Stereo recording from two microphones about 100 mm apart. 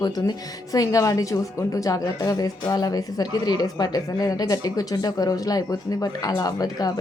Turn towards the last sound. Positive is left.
turn(degrees=40)  # may be behind; listen again after turning